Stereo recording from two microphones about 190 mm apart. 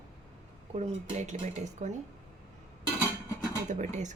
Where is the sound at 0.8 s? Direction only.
40° right (ahead or behind).